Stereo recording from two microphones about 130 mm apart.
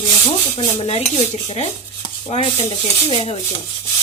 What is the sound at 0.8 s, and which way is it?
Speech, 50° left (ahead or behind).